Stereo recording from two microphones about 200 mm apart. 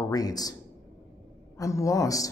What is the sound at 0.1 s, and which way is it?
Speech, 20° left (ahead or behind).